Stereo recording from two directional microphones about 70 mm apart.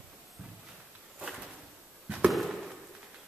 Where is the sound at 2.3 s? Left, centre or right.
Centre.